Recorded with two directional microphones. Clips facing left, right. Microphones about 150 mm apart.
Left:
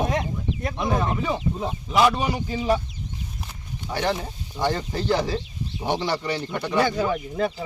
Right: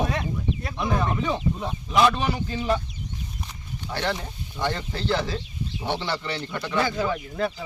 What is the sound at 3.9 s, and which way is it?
Speech, 10° left (ahead or behind).